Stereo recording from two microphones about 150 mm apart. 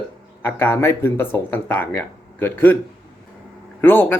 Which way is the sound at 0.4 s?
15° left (ahead or behind).